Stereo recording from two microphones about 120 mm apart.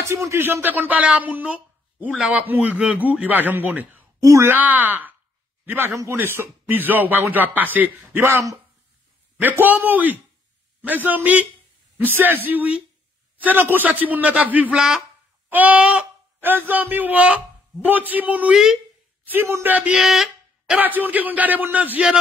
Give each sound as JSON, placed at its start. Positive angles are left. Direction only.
{"t": 0.1, "sound": "speech", "side_deg": -25}
{"t": 19.3, "sound": "speech", "side_deg": -20}